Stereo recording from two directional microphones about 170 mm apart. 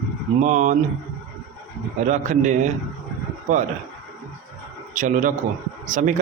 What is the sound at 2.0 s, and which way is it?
A man's voice, 45° right (ahead or behind).